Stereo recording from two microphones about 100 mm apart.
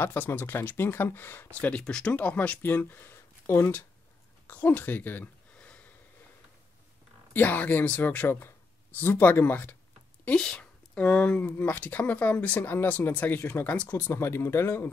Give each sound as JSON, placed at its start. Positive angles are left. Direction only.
{"t": 0.0, "sound": "speech", "side_deg": 20}
{"t": 7.3, "sound": "speech", "side_deg": 15}
{"t": 10.2, "sound": "speech", "side_deg": 10}